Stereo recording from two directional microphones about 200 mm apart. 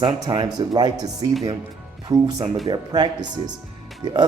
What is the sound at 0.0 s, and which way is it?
Speech, 20° right (ahead or behind).